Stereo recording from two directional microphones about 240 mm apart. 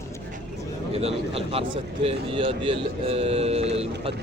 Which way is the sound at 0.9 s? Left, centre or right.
Right.